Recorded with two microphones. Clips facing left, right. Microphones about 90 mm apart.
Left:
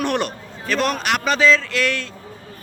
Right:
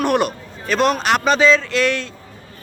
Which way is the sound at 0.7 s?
20° right (ahead or behind).